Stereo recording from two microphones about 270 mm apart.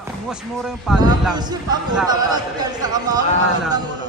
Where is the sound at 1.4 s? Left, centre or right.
Centre.